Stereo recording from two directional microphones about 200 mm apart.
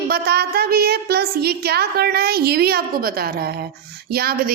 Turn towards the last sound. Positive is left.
turn(degrees=-50)  # may be behind; listen again after turning